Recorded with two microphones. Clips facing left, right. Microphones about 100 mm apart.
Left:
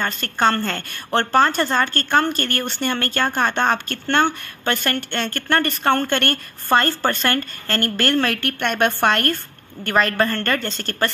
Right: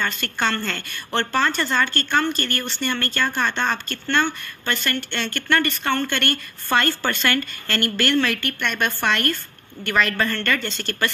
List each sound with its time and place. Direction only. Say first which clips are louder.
0.0 s a woman's voice: left 4 dB; 40° left (ahead or behind)